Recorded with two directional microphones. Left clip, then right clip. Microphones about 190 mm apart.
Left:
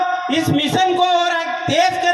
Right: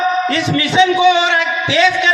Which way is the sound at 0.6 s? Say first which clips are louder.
Right 4 dB; 20° left (ahead or behind).